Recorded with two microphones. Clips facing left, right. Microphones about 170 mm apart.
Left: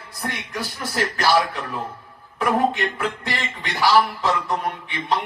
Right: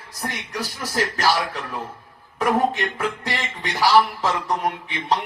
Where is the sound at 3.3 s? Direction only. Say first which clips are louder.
Right 1 dB; 40° right (ahead or behind).